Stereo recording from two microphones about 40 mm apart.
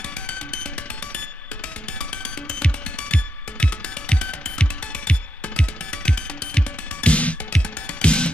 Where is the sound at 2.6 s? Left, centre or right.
Left.